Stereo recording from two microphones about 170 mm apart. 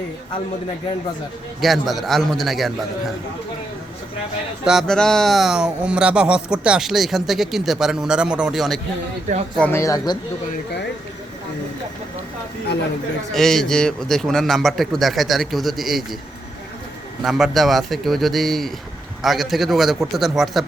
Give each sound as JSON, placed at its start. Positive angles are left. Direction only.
{"t": 1.6, "sound": "speech", "side_deg": 0}
{"t": 4.6, "sound": "speech", "side_deg": 0}
{"t": 9.6, "sound": "speech", "side_deg": 15}
{"t": 13.3, "sound": "speech", "side_deg": 0}
{"t": 17.2, "sound": "speech", "side_deg": 0}